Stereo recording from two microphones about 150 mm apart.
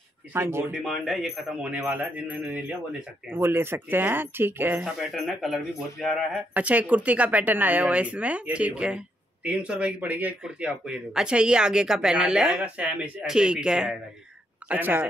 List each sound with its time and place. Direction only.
0.3 s speech: 15° right (ahead or behind)
0.8 s speech: centre (ahead or behind)
4.9 s speech: centre (ahead or behind)